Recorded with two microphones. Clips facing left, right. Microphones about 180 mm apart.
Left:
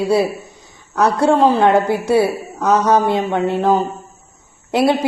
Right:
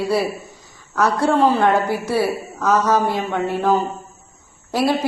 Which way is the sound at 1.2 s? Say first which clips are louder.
Left 3 dB; 15° left (ahead or behind).